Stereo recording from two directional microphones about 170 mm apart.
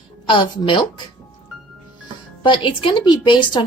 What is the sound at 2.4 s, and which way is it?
A woman's voice, 30° left (ahead or behind).